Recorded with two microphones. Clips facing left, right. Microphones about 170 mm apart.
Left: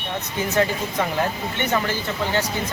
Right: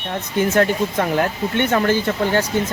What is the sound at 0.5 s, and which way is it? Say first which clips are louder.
Speech: right 2 dB; 50° right (ahead or behind).